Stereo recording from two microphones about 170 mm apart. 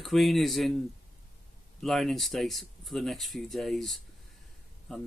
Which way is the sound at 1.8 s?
Centre (ahead or behind).